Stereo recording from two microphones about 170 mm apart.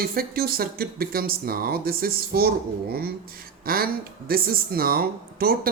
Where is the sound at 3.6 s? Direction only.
60° right (ahead or behind).